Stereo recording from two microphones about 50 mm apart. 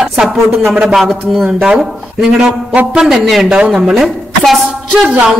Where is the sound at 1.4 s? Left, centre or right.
Centre.